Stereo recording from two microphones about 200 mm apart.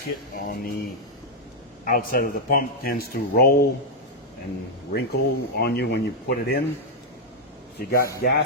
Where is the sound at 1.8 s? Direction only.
45° left (ahead or behind).